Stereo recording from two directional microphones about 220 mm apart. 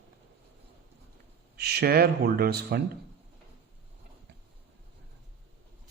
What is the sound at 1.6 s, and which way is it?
A man's voice, 45° right (ahead or behind).